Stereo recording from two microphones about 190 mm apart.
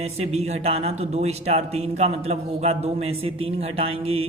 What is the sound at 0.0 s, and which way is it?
A man's voice, 35° right (ahead or behind).